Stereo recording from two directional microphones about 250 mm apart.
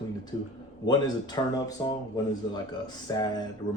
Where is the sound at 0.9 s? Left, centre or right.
Centre.